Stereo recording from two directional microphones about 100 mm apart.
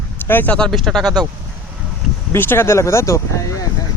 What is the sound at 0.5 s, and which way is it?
Speech, 5° left (ahead or behind).